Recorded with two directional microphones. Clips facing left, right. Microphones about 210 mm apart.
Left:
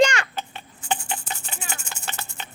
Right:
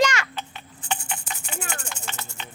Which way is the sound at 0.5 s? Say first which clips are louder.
Left 4 dB; 35° left (ahead or behind).